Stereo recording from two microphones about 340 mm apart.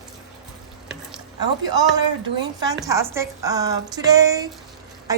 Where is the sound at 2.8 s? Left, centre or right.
Centre.